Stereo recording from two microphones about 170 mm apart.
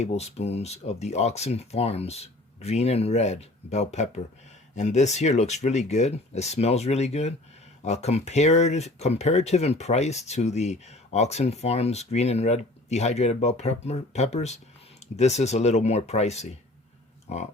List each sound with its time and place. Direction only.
0.0 s speech: 40° left (ahead or behind)